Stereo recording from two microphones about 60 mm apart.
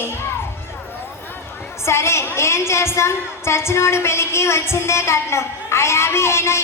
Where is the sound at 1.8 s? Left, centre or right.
Left.